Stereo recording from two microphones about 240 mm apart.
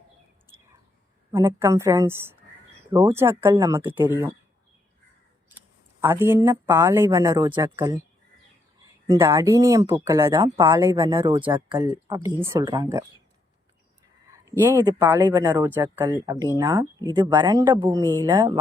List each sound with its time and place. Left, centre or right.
1.3 s speech: centre
6.0 s speech: centre
14.3 s speech: centre